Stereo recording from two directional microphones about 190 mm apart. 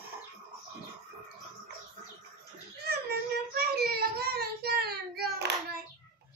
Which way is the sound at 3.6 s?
55° right (ahead or behind).